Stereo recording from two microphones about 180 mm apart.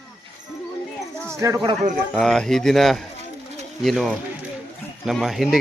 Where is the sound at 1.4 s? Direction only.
20° right (ahead or behind).